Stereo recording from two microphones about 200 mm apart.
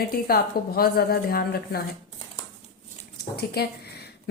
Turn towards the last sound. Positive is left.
turn(degrees=55)  # may be behind; listen again after turning